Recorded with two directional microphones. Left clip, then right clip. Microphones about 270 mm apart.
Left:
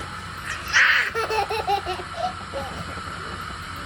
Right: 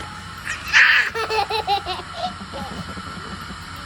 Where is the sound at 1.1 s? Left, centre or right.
Centre.